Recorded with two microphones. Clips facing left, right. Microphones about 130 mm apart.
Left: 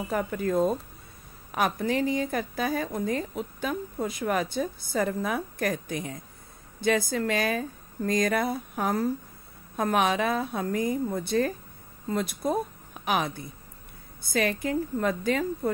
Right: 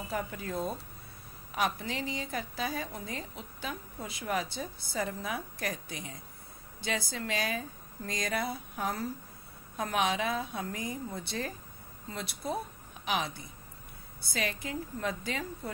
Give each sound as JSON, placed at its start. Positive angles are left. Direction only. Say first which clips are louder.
{"t": 0.1, "sound": "a woman's voice", "louder": "left 9 dB", "side_deg": 50}